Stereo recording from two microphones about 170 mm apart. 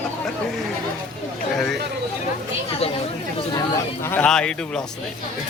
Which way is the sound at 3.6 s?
15° left (ahead or behind).